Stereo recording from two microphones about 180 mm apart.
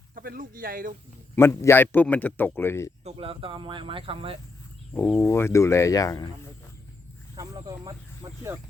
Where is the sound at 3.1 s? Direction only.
30° right (ahead or behind).